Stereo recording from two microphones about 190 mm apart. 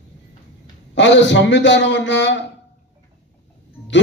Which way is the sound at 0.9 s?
70° left (ahead or behind).